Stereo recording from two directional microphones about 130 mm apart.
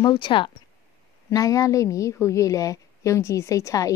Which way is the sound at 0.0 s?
35° left (ahead or behind).